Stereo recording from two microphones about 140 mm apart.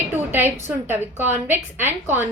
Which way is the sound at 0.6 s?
15° right (ahead or behind).